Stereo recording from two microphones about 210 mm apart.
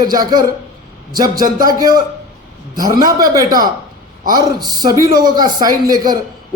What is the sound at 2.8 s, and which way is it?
A man's voice, 20° right (ahead or behind).